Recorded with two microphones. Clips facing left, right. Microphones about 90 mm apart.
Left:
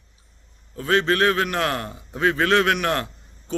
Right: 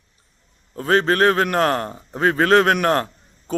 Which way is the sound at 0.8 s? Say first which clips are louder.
Right 3 dB; 40° right (ahead or behind).